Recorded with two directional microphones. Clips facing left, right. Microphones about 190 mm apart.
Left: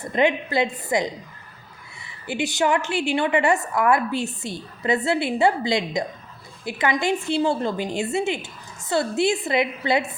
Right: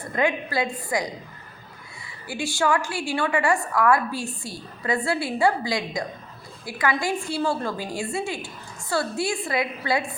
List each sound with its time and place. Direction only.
0.1 s a woman's voice: 25° left (ahead or behind)
2.2 s a woman's voice: 20° left (ahead or behind)